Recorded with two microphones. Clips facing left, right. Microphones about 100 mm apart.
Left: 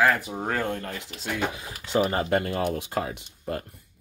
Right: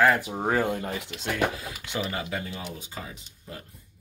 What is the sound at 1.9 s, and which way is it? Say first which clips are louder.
Speech: left 9 dB; 40° left (ahead or behind).